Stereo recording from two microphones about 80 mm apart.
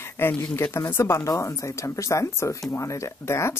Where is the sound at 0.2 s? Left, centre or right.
Left.